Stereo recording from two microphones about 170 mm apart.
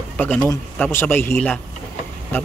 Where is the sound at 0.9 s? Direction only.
15° left (ahead or behind).